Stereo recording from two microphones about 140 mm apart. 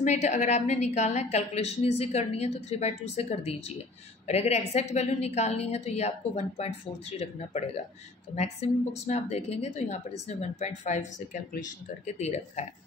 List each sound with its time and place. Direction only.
0.0 s a woman's voice: 55° left (ahead or behind)
12.2 s a woman's voice: 50° left (ahead or behind)